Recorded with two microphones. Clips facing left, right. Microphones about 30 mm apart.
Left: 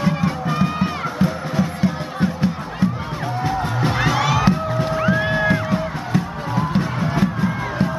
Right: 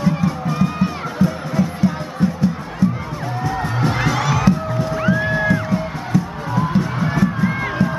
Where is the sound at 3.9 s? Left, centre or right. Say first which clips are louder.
Left 3 dB; centre.